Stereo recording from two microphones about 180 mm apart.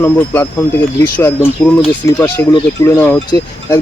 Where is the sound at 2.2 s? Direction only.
20° left (ahead or behind).